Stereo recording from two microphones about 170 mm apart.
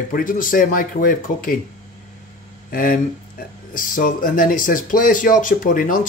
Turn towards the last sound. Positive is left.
turn(degrees=50)  # may be behind; listen again after turning